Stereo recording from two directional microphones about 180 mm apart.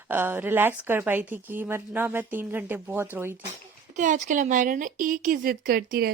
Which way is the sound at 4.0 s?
45° right (ahead or behind).